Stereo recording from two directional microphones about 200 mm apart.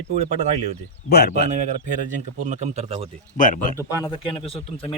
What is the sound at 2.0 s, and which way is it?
Speech, 35° right (ahead or behind).